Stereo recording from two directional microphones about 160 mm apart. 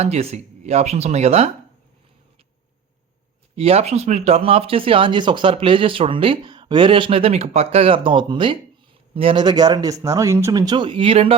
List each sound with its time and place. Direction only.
0.0 s speech: 40° right (ahead or behind)
3.5 s speech: 40° right (ahead or behind)